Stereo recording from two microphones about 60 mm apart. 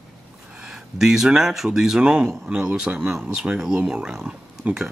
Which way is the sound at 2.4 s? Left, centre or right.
Right.